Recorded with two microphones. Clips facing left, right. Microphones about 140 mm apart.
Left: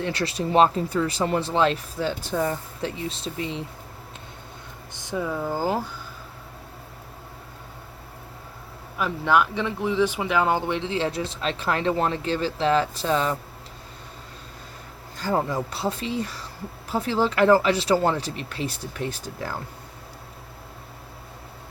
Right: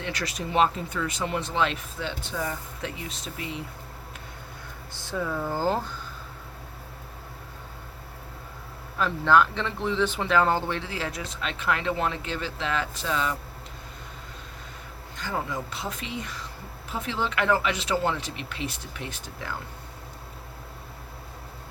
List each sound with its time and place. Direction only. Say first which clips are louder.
0.0 s speech: left 6 dB; 30° left (ahead or behind)
4.9 s speech: left 2 dB; 15° left (ahead or behind)
9.0 s speech: even; 10° left (ahead or behind); by 13.3 s 35° left (ahead or behind)
15.2 s speech: left 7 dB; 35° left (ahead or behind)